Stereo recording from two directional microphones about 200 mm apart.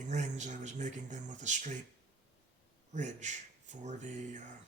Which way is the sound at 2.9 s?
35° right (ahead or behind).